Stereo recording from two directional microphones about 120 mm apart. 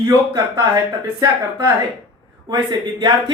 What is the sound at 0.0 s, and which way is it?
Speech, 35° right (ahead or behind).